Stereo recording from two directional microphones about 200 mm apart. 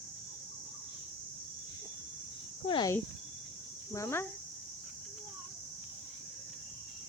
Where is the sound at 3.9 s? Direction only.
15° left (ahead or behind).